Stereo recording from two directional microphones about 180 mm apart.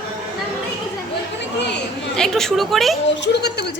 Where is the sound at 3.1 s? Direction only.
70° left (ahead or behind).